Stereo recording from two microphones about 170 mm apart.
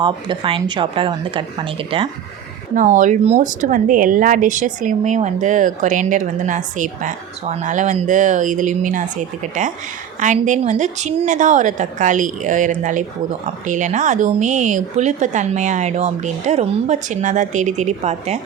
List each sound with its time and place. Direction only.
0.0 s a woman's voice: 30° right (ahead or behind)
2.7 s a woman's voice: 50° right (ahead or behind)